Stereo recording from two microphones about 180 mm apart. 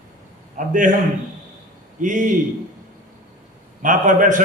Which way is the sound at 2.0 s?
45° right (ahead or behind).